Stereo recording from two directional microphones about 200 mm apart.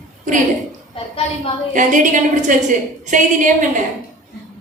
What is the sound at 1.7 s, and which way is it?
A woman's voice, 40° right (ahead or behind).